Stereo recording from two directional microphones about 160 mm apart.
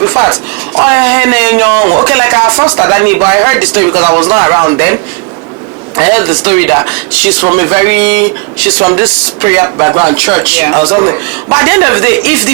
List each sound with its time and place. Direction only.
0.0 s a man's voice: 20° right (ahead or behind)
6.0 s a man's voice: 10° right (ahead or behind)
11.5 s speech: 10° right (ahead or behind)